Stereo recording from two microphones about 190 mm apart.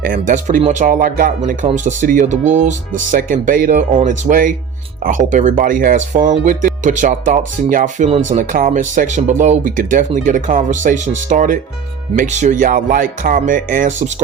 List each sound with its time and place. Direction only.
0.0 s speech: 45° right (ahead or behind)